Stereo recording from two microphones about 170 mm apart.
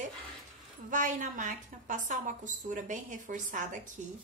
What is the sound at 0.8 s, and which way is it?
A woman's voice, 50° right (ahead or behind).